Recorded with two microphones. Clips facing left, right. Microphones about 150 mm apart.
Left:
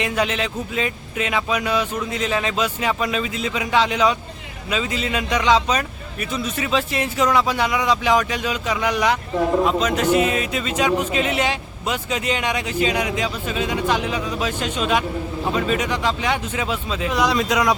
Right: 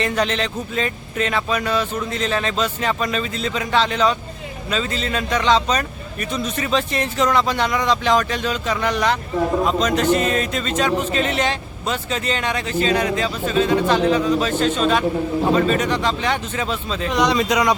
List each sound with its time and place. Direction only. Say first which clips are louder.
0.0 s speech: right 1 dB; 10° left (ahead or behind)